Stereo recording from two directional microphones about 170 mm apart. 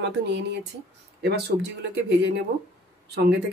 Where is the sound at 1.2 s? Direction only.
75° right (ahead or behind).